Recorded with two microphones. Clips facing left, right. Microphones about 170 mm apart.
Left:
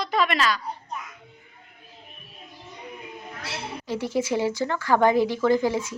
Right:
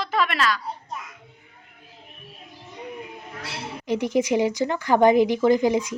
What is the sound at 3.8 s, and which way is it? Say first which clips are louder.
Speech: right 4 dB; 20° right (ahead or behind).